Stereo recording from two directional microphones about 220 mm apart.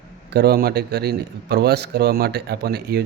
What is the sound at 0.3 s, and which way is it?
A man's voice, 45° right (ahead or behind).